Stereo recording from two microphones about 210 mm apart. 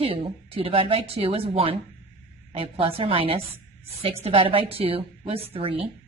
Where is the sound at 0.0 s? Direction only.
25° right (ahead or behind).